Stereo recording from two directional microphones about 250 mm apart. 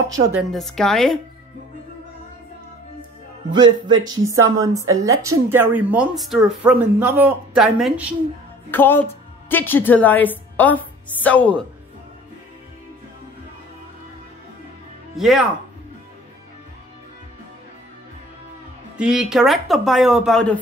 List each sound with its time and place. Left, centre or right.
0.5 s speech: centre
3.5 s speech: centre
8.6 s a woman's voice: centre
15.1 s speech: centre
18.9 s speech: centre